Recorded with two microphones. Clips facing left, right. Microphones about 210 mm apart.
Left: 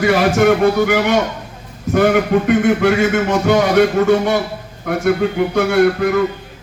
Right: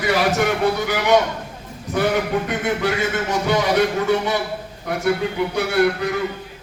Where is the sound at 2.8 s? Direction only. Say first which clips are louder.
Left 7 dB; 50° left (ahead or behind).